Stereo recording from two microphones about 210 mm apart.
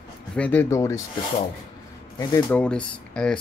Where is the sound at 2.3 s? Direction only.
5° left (ahead or behind).